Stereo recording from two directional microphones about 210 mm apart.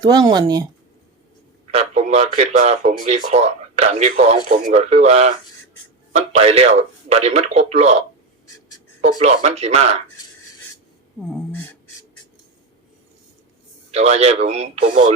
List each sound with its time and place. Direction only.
0.0 s speech: 20° right (ahead or behind)
1.7 s speech: 35° right (ahead or behind)
9.2 s speech: 30° right (ahead or behind)
11.2 s a sound: centre (ahead or behind)
13.9 s speech: 30° right (ahead or behind)